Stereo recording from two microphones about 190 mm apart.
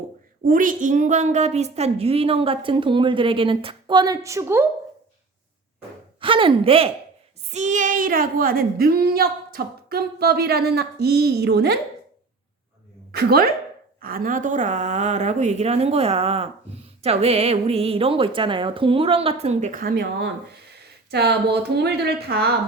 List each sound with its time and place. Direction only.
0.4 s a woman's voice: 45° right (ahead or behind); by 4.6 s 15° right (ahead or behind)
6.1 s a woman's voice: 25° right (ahead or behind); by 11.8 s 60° right (ahead or behind)
13.1 s a woman's voice: 55° right (ahead or behind)